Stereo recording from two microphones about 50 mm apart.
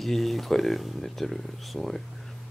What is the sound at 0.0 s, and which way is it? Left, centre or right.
Speech, centre.